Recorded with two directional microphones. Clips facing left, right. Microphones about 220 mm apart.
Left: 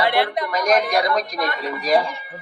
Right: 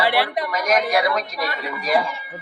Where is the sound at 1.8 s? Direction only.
35° left (ahead or behind).